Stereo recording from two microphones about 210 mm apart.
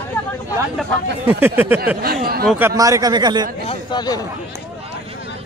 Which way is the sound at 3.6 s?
20° left (ahead or behind).